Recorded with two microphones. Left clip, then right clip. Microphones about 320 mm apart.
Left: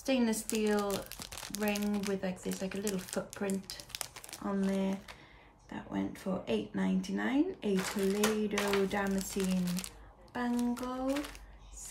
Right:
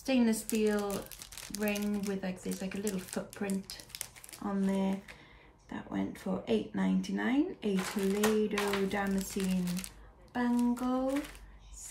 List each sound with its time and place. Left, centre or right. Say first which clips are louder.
0.0 s speech: right 1 dB; centre